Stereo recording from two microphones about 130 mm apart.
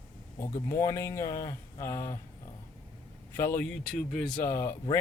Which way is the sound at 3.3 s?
20° left (ahead or behind).